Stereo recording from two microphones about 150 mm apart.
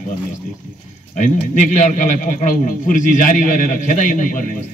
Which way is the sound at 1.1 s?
55° left (ahead or behind).